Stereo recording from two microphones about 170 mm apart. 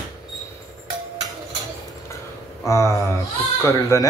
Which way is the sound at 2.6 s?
15° left (ahead or behind).